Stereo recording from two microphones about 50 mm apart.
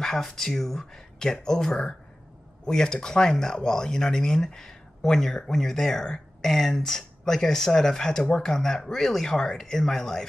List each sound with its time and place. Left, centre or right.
0.0 s speech: centre